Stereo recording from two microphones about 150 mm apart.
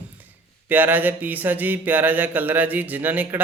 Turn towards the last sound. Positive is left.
turn(degrees=-10)  # may be behind; listen again after turning